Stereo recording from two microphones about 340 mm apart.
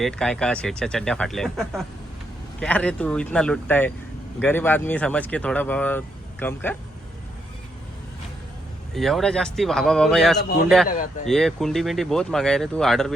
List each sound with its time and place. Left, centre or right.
0.0 s speech: centre
9.0 s speech: centre
10.8 s speech: left
11.3 s speech: centre